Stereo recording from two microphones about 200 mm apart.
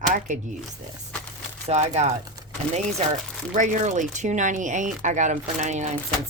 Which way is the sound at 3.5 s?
40° right (ahead or behind).